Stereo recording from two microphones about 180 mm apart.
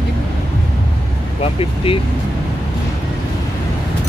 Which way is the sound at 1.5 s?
30° left (ahead or behind).